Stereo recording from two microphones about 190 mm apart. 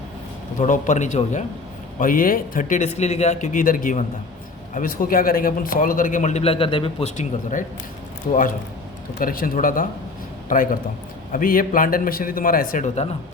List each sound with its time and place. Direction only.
0.6 s a man's voice: 40° left (ahead or behind)